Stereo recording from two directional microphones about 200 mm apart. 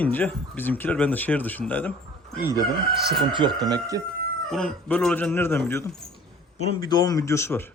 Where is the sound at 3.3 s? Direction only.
20° right (ahead or behind).